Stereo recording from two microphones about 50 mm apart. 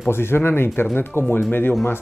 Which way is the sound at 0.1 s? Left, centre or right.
Left.